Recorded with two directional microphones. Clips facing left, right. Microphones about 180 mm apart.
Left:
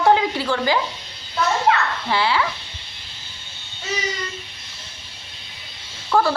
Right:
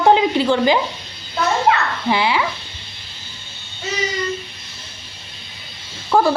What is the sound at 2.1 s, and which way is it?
Speech, 15° right (ahead or behind).